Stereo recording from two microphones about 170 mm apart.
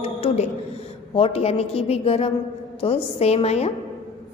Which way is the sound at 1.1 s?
35° left (ahead or behind).